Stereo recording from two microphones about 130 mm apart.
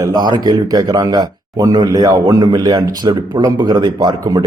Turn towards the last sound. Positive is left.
turn(degrees=-35)  # may be behind; listen again after turning